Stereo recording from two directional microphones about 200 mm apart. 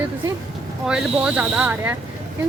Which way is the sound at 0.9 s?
5° right (ahead or behind).